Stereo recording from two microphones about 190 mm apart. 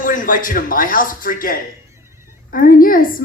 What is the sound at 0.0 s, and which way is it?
A woman's voice, 45° left (ahead or behind).